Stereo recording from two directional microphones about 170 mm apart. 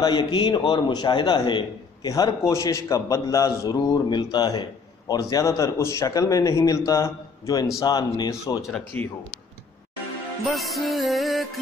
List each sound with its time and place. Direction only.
0.0 s a man's voice: 25° left (ahead or behind)
8.9 s speech: 10° left (ahead or behind)
10.4 s music: centre (ahead or behind)